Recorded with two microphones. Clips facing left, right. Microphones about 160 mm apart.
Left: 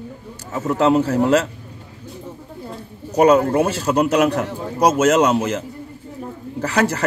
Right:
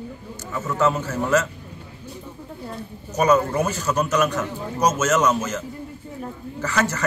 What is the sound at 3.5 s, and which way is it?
Speech, 30° left (ahead or behind).